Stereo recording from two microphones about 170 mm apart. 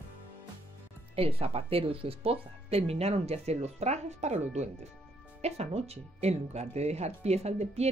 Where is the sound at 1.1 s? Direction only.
35° right (ahead or behind).